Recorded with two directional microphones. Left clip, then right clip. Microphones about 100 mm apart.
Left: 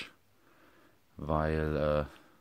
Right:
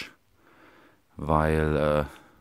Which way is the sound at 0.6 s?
50° right (ahead or behind).